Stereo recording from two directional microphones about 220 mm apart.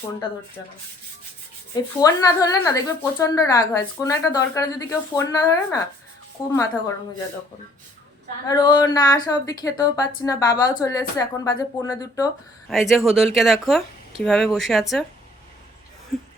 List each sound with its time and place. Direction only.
1.7 s speech: 15° left (ahead or behind)
8.4 s speech: 15° left (ahead or behind)
12.6 s speech: centre (ahead or behind)
16.1 s chuckle: centre (ahead or behind)